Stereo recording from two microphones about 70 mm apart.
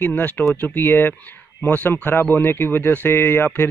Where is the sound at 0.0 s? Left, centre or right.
Left.